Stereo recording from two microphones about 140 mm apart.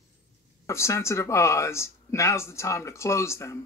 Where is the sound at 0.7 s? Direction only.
20° left (ahead or behind).